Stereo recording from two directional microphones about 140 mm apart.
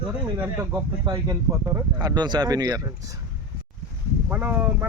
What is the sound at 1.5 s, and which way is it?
Speech, 20° right (ahead or behind).